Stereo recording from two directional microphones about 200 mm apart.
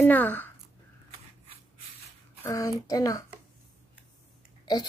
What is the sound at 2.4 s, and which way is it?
Speech, 15° left (ahead or behind).